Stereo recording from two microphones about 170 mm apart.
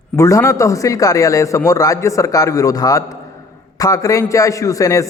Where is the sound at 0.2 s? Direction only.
20° left (ahead or behind).